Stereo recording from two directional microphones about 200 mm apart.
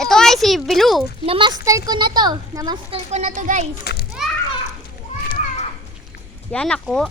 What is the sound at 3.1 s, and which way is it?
Speech, 35° right (ahead or behind).